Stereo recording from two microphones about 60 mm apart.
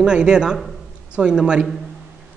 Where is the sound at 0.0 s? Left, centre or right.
Centre.